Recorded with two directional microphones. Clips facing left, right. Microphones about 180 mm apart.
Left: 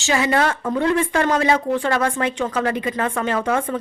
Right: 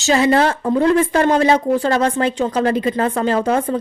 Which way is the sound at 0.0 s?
35° right (ahead or behind).